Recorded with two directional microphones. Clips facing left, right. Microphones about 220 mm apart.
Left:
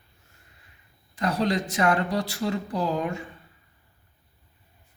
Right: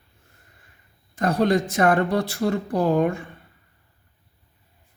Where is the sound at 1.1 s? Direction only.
50° right (ahead or behind).